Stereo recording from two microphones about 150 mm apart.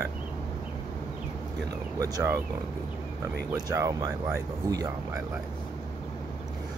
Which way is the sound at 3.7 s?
20° right (ahead or behind).